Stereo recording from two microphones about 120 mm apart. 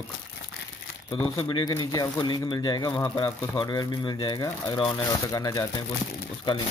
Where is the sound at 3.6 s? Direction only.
40° left (ahead or behind).